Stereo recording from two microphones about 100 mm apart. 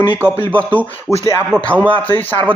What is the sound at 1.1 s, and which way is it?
Speech, 30° left (ahead or behind).